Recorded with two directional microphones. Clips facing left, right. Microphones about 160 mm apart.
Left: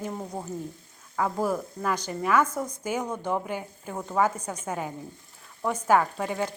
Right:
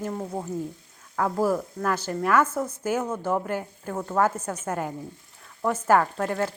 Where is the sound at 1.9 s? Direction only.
5° right (ahead or behind).